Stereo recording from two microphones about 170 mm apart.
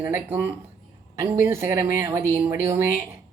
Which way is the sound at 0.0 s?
15° right (ahead or behind).